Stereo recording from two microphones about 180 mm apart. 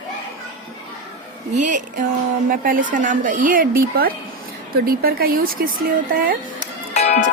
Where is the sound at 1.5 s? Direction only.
45° right (ahead or behind).